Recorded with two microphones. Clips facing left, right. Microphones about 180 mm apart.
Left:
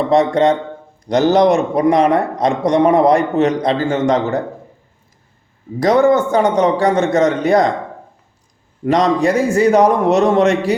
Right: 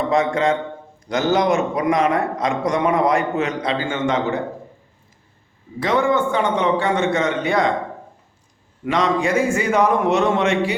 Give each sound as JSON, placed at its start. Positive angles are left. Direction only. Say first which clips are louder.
{"t": 0.1, "sound": "a man's voice", "louder": "left 6 dB", "side_deg": 35}
{"t": 5.8, "sound": "a man's voice", "louder": "left 6 dB", "side_deg": 40}
{"t": 8.8, "sound": "a man's voice", "louder": "left 5 dB", "side_deg": 40}